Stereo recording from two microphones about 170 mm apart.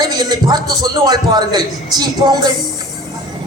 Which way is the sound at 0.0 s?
25° right (ahead or behind).